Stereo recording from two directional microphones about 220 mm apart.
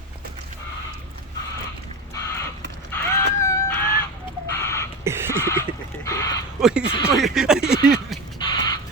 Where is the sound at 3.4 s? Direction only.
10° left (ahead or behind).